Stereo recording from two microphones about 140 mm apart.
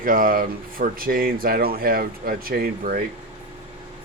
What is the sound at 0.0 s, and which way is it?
Speech, 90° right.